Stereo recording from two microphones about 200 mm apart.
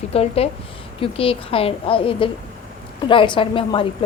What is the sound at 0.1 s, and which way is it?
A woman's voice, 30° left (ahead or behind).